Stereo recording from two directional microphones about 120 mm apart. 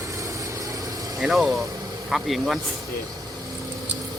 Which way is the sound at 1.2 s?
Centre (ahead or behind).